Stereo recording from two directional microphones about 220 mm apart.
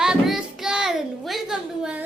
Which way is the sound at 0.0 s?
5° right (ahead or behind).